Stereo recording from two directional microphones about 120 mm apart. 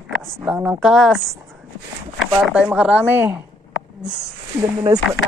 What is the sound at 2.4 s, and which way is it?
Speech, 5° right (ahead or behind).